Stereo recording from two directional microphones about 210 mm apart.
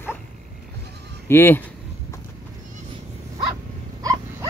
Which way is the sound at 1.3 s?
10° left (ahead or behind).